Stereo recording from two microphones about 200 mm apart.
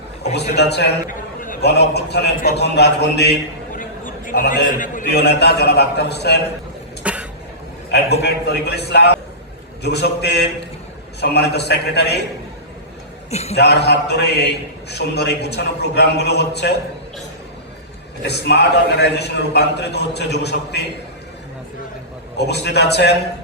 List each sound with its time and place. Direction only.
0.5 s a man's voice: 55° left (ahead or behind)
7.0 s a sound: 5° right (ahead or behind)
7.9 s a man's voice: 55° left (ahead or behind)
13.3 s a man's voice: 30° left (ahead or behind)
13.6 s a man's voice: 55° left (ahead or behind)
18.2 s a man's voice: 55° left (ahead or behind)
22.4 s a man's voice: 55° left (ahead or behind)